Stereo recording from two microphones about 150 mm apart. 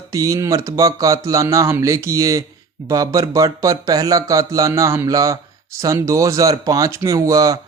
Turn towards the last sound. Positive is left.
turn(degrees=-20)  # may be behind; listen again after turning